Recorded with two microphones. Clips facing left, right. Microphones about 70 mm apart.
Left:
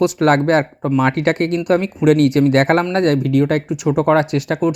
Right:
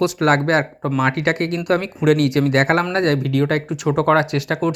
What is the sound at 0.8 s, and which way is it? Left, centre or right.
Speech, right.